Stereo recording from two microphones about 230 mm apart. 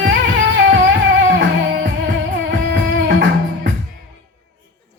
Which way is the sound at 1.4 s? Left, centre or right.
Right.